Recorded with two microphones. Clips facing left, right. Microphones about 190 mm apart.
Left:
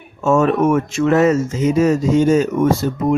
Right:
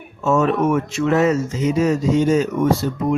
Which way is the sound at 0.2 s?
50° left (ahead or behind).